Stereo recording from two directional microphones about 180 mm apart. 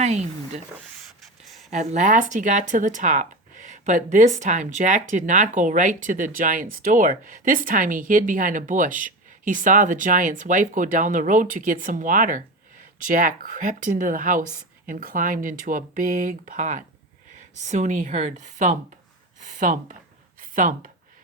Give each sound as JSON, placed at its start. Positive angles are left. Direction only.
{"t": 0.0, "sound": "speech", "side_deg": -40}
{"t": 1.7, "sound": "speech", "side_deg": -40}
{"t": 20.4, "sound": "a sound", "side_deg": -45}